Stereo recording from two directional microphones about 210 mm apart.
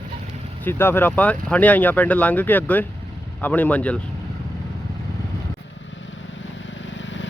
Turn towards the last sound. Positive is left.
turn(degrees=60)  # may be behind; listen again after turning